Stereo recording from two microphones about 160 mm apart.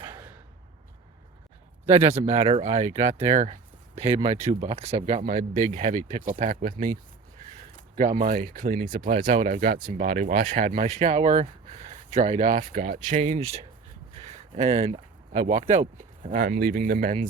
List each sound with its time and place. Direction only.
2.1 s speech: 40° right (ahead or behind)
7.9 s speech: 55° right (ahead or behind)